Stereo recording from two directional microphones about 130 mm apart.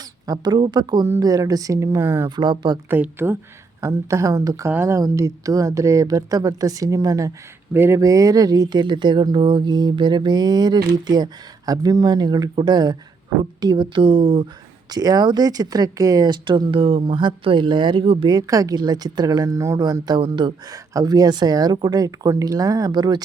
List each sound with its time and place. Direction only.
0.3 s speech: 30° right (ahead or behind)
2.3 s speech: 35° right (ahead or behind)
2.9 s speech: 15° right (ahead or behind); by 23.2 s 30° right (ahead or behind)